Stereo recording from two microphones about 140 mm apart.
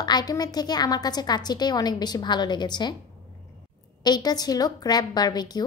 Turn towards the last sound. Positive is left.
turn(degrees=30)  # may be behind; listen again after turning